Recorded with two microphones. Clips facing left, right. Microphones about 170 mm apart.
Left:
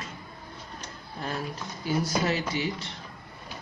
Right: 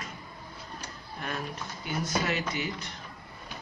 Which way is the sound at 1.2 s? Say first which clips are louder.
Left 2 dB; 35° left (ahead or behind).